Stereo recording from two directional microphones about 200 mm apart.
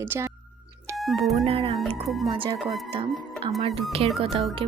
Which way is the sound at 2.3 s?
25° right (ahead or behind).